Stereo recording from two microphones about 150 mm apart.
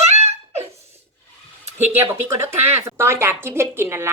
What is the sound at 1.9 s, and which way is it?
Speech, 15° right (ahead or behind).